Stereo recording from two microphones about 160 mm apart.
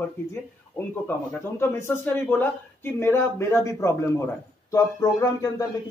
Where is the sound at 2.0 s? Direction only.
10° left (ahead or behind).